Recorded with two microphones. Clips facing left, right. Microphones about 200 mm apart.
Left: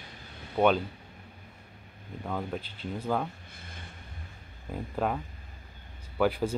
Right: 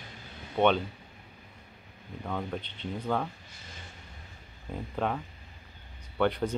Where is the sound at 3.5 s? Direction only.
55° left (ahead or behind).